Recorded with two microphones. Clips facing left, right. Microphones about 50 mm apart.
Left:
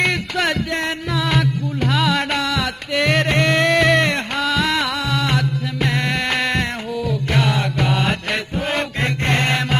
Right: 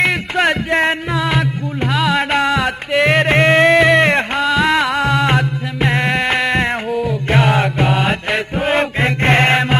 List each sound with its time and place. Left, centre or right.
1.1 s music: centre
2.3 s music: right
3.7 s a sound: centre
4.4 s music: centre
5.0 s music: right
7.1 s mantra: right
7.9 s mantra: centre
9.2 s chant: right